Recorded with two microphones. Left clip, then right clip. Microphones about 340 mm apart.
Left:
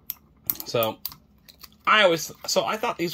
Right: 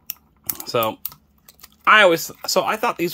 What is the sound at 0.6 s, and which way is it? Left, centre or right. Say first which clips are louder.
Speech: right 4 dB; centre.